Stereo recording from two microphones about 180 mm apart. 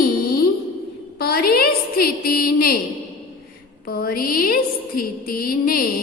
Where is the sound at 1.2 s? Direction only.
60° left (ahead or behind).